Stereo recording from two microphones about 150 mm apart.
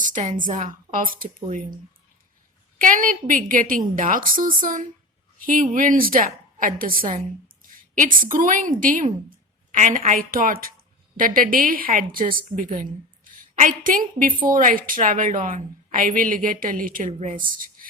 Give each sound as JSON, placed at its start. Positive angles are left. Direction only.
{"t": 0.0, "sound": "a woman's voice", "side_deg": -60}
{"t": 17.1, "sound": "a woman's voice", "side_deg": -50}